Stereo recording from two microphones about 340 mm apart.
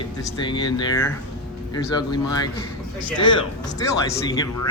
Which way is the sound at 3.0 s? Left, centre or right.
Centre.